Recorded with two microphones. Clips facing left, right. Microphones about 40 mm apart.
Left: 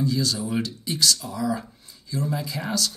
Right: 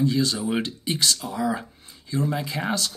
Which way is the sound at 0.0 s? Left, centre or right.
Right.